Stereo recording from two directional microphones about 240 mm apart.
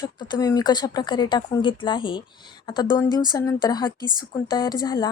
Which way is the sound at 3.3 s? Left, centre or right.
Centre.